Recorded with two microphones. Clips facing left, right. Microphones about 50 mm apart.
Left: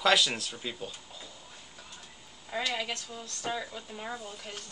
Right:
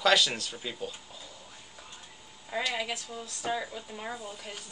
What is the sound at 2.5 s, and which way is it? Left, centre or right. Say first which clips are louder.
Speech: right 1 dB; centre.